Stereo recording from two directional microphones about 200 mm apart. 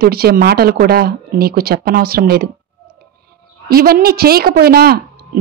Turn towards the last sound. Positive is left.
turn(degrees=-50)  # may be behind; listen again after turning